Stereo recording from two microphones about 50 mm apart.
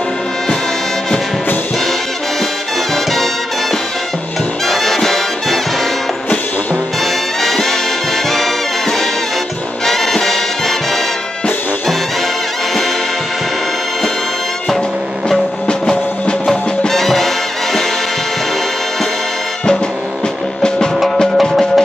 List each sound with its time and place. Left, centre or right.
4.6 s brass instrument: centre
7.4 s music: centre
9.8 s music: centre
16.4 s music: centre
21.4 s music: centre